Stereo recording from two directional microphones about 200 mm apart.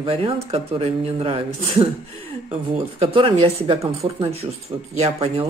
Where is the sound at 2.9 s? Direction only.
25° right (ahead or behind).